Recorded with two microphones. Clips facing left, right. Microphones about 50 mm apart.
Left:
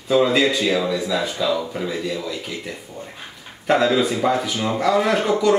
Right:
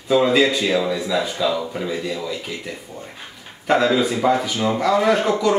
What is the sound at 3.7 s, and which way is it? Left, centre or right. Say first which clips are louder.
Speech: even; centre.